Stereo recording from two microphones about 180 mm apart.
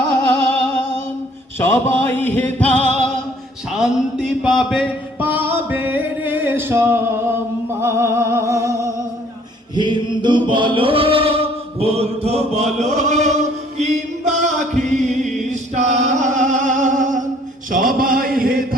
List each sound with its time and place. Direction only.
1.5 s music: 15° left (ahead or behind)
3.7 s music: 5° right (ahead or behind)
9.7 s chant: 25° right (ahead or behind); by 15.3 s 40° right (ahead or behind)
15.4 s music: 40° right (ahead or behind)
17.7 s a sound: 50° right (ahead or behind)